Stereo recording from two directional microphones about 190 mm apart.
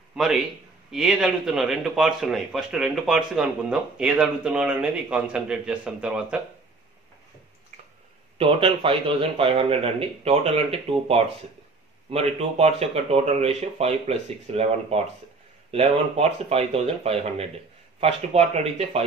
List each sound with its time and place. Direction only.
0.1 s a man's voice: centre (ahead or behind)
8.4 s speech: 30° right (ahead or behind)